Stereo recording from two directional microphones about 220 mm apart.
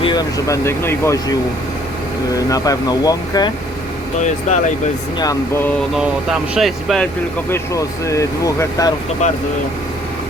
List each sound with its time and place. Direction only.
0.0 s speech: 20° left (ahead or behind)
4.2 s speech: 35° left (ahead or behind)
5.2 s speech: 15° left (ahead or behind)
6.5 s speech: centre (ahead or behind)
7.5 s speech: 15° left (ahead or behind)
9.2 s speech: 30° left (ahead or behind)